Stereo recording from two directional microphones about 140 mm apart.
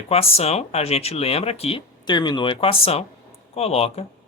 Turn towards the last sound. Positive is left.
turn(degrees=45)  # may be behind; listen again after turning